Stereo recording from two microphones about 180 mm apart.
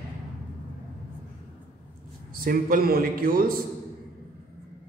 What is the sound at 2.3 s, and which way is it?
A man's voice, 55° right (ahead or behind).